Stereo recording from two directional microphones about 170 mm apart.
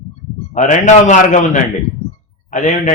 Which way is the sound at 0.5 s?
45° left (ahead or behind).